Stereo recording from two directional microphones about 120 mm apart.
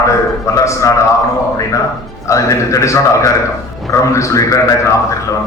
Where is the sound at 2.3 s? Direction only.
25° left (ahead or behind).